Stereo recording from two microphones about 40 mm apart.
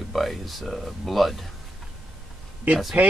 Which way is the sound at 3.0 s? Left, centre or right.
Right.